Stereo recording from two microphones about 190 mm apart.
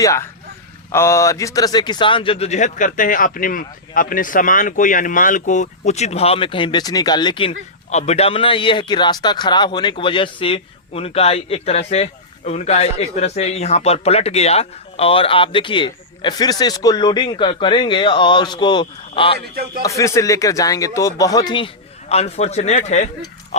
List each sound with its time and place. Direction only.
0.0 s speech: 15° left (ahead or behind)
7.9 s a man's voice: 35° left (ahead or behind)
19.8 s speech: 15° left (ahead or behind)
22.1 s speech: 35° left (ahead or behind)